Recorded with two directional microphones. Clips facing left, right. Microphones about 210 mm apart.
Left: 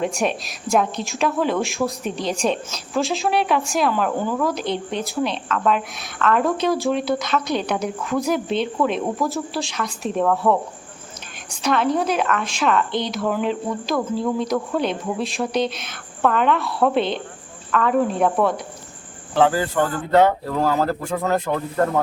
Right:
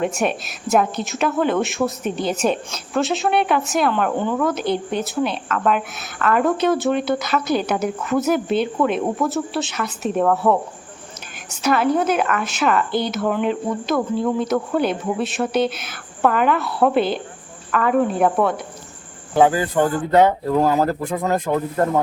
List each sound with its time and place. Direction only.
0.0 s a woman's voice: centre (ahead or behind)
19.3 s speech: 15° right (ahead or behind)